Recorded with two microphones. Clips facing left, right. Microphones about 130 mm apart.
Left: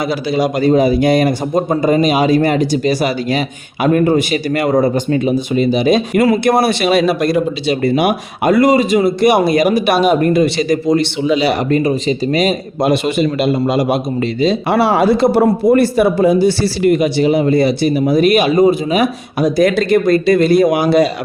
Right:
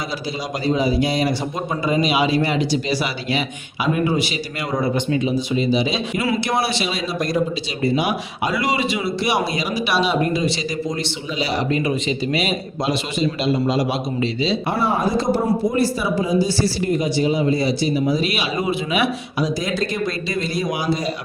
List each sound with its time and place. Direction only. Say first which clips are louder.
0.3 s speech: left 10 dB; 60° left (ahead or behind)
11.7 s speech: left 7 dB; 40° left (ahead or behind)
14.7 s a man's voice: left 9 dB; 90° left; by 21.1 s 65° left (ahead or behind)